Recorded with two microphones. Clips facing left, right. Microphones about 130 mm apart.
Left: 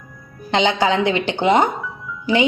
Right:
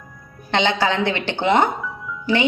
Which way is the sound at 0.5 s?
15° left (ahead or behind).